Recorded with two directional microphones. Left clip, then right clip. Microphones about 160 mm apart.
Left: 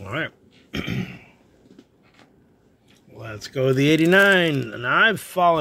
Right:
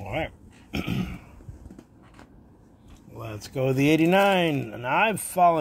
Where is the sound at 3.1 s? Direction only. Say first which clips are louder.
Left 4 dB; 30° left (ahead or behind).